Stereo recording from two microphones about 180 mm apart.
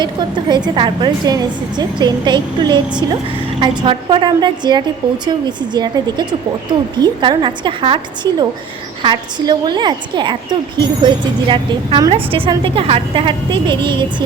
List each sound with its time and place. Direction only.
0.0 s a woman's voice: 25° right (ahead or behind)